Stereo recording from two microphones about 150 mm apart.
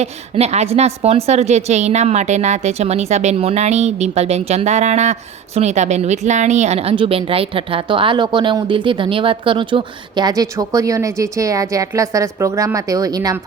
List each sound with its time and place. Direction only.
0.0 s a woman's voice: 45° right (ahead or behind); by 13.3 s 25° right (ahead or behind)